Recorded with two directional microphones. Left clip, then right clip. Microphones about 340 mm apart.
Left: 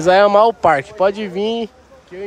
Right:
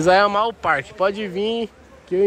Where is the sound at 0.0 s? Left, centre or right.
Centre.